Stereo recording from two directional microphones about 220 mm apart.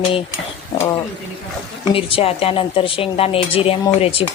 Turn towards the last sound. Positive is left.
turn(degrees=25)  # may be behind; listen again after turning